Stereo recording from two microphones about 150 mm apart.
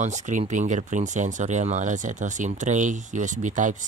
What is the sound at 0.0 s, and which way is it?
Speech, 50° right (ahead or behind).